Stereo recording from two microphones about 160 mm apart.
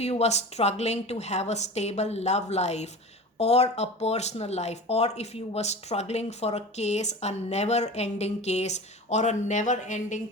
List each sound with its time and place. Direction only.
0.0 s speech: 40° left (ahead or behind)